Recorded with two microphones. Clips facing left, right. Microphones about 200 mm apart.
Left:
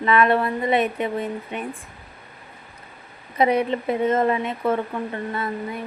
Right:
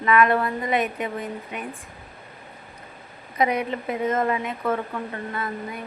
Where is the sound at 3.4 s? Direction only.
30° left (ahead or behind).